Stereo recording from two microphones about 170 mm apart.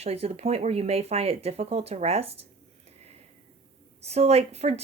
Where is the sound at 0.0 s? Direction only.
35° right (ahead or behind).